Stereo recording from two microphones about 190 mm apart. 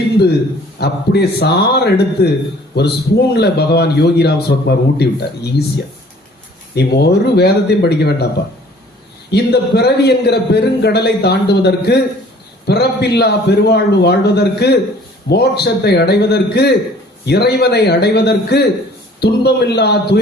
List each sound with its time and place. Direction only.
0.8 s a man's voice: 60° left (ahead or behind)
9.3 s a man's voice: 60° left (ahead or behind)